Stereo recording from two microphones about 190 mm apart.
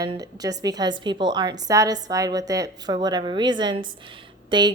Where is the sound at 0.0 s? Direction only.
20° right (ahead or behind).